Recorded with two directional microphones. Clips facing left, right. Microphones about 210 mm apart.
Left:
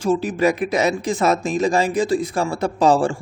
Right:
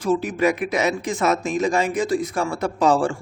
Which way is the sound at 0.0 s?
30° left (ahead or behind).